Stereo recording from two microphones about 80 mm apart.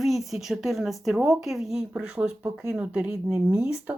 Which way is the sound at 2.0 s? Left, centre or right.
Centre.